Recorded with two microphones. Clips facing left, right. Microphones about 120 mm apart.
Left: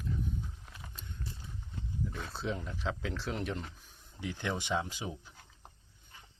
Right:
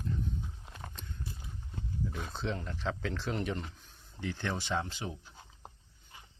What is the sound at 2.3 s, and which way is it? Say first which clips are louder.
Speech: left 1 dB; 5° left (ahead or behind).